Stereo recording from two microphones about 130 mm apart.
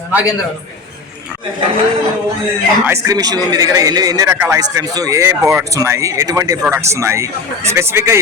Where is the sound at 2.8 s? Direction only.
25° right (ahead or behind).